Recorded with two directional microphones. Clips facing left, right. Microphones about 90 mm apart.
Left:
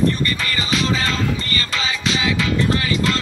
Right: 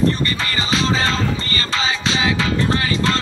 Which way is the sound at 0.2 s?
30° right (ahead or behind).